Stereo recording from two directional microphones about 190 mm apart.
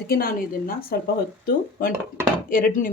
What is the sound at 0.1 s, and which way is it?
Speech, 50° left (ahead or behind).